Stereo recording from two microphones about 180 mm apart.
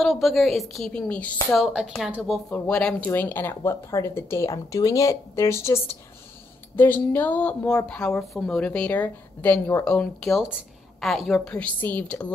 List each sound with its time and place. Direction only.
0.0 s a woman's voice: centre (ahead or behind)